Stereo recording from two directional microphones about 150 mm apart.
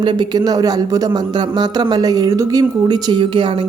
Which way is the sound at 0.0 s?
30° right (ahead or behind).